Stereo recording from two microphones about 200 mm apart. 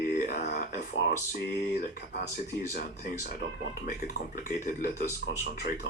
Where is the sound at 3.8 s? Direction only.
40° left (ahead or behind).